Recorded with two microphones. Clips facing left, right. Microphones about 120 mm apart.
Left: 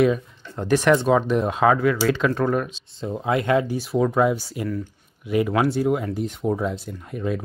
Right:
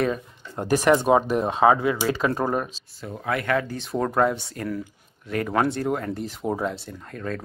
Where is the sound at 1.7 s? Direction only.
20° right (ahead or behind).